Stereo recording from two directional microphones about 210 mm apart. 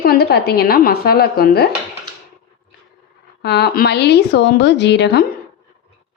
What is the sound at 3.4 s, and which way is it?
A woman's voice, 50° left (ahead or behind).